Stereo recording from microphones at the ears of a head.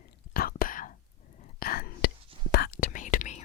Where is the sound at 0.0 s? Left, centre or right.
Left.